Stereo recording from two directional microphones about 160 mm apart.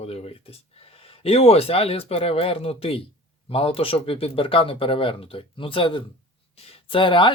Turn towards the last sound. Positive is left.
turn(degrees=30)  # may be behind; listen again after turning